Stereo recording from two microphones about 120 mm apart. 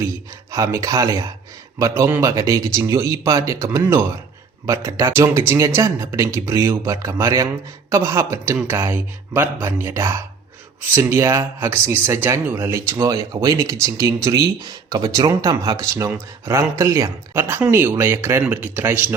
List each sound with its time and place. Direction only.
0.5 s speech: 25° right (ahead or behind)